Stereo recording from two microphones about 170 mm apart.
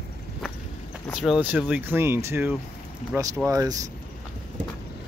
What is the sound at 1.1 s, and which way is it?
Speech, 5° right (ahead or behind).